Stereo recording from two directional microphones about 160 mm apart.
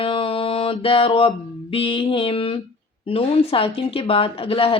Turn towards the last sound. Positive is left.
turn(degrees=35)  # may be behind; listen again after turning